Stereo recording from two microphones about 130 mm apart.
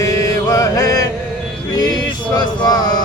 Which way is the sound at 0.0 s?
25° left (ahead or behind).